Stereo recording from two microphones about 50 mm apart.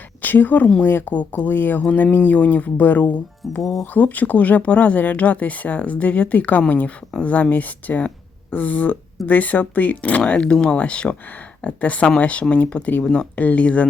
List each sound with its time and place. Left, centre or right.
0.2 s speech: left
3.6 s speech: centre
3.9 s speech: left
13.0 s speech: centre
13.3 s speech: left